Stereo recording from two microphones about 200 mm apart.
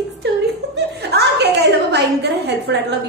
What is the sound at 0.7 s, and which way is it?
Chuckle, 55° right (ahead or behind).